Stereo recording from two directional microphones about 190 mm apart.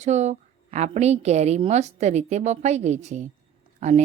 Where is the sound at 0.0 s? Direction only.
35° right (ahead or behind).